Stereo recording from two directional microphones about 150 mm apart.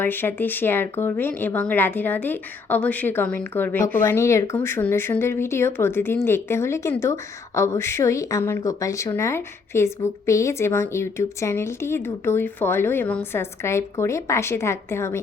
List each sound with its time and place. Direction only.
0.0 s a woman's voice: 15° left (ahead or behind)